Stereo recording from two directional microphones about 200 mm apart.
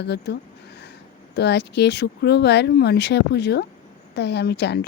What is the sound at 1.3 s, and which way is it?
A woman's voice, 60° left (ahead or behind).